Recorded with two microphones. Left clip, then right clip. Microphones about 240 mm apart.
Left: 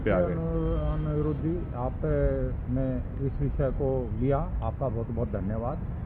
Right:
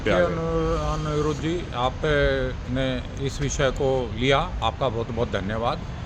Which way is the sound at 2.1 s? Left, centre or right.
Right.